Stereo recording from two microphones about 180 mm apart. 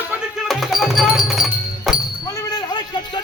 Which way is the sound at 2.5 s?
25° left (ahead or behind).